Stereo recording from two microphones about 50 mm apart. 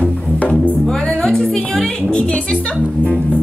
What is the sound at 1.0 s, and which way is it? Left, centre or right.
Music, centre.